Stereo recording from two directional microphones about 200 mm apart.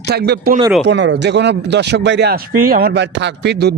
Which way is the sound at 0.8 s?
65° right (ahead or behind).